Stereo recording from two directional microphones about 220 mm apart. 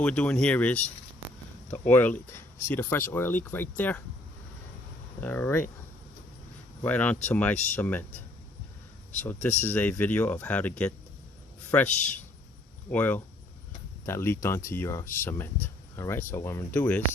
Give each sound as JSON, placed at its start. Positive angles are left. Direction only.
{"t": 0.0, "sound": "speech", "side_deg": 5}
{"t": 1.9, "sound": "speech", "side_deg": 5}
{"t": 5.2, "sound": "speech", "side_deg": 5}
{"t": 6.8, "sound": "speech", "side_deg": 5}
{"t": 9.1, "sound": "speech", "side_deg": 5}